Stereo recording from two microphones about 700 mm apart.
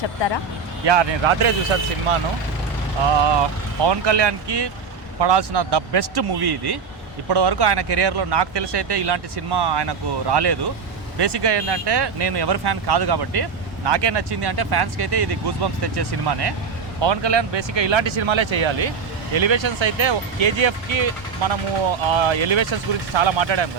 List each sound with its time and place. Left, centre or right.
0.9 s speech: right
3.2 s speech: right